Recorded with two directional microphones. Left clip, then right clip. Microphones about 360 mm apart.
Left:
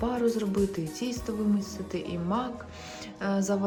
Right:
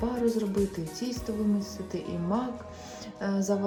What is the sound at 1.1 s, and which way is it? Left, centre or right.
Speech, centre.